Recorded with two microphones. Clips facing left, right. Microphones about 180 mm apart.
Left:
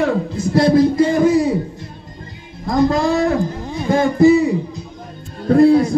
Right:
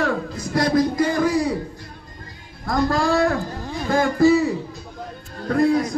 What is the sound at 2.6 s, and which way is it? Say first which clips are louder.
A man's voice: left 5 dB; 20° left (ahead or behind).